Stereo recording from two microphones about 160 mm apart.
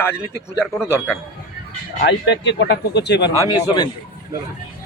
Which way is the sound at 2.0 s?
90° left.